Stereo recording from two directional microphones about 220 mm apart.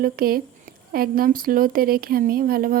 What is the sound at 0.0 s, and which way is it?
Speech, 40° right (ahead or behind).